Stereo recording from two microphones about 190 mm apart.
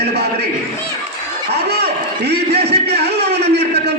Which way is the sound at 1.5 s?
60° right (ahead or behind).